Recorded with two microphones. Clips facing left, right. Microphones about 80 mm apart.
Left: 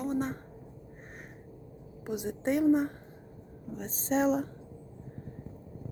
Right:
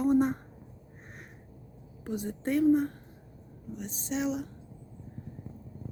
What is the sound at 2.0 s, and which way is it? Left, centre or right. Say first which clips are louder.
Speech: left 1 dB; centre.